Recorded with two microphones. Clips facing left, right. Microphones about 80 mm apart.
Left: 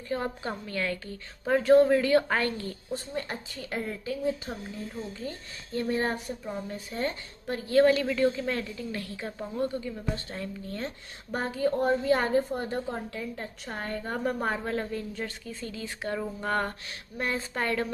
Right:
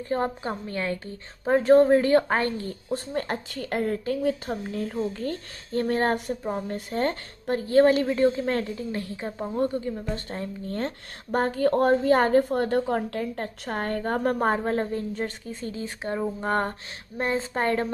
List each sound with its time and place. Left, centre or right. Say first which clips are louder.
0.1 s speech: right 4 dB; right
3.2 s a woman's voice: right 6 dB; right
5.7 s speech: right 5 dB; right
11.3 s a woman's voice: right 5 dB; right
14.5 s a woman's voice: right 5 dB; right